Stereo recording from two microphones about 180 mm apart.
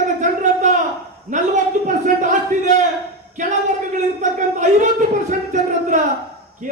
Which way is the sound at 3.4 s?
45° right (ahead or behind).